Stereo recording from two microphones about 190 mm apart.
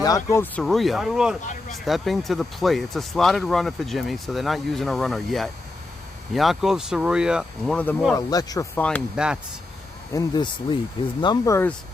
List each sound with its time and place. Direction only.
0.0 s speech: 15° left (ahead or behind)
0.6 s speech: centre (ahead or behind)
7.8 s speech: 5° left (ahead or behind)
8.1 s speech: 20° left (ahead or behind)
9.1 s speech: 5° right (ahead or behind)
10.1 s speech: 20° left (ahead or behind)